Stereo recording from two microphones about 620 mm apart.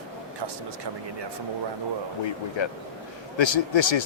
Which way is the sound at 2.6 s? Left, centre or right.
Left.